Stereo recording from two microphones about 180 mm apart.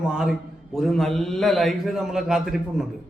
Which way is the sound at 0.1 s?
5° right (ahead or behind).